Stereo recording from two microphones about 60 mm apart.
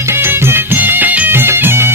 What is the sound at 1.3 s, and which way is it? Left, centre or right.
Music, right.